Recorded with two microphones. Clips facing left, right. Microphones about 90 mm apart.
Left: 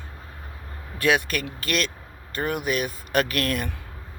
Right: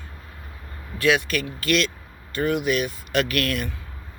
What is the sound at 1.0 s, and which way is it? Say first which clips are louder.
Speech: right 1 dB; 45° left (ahead or behind).